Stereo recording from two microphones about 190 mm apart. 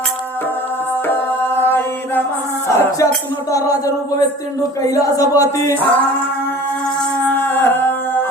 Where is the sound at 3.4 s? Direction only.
20° left (ahead or behind).